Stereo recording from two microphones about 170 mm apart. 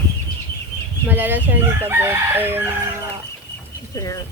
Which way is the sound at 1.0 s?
10° right (ahead or behind).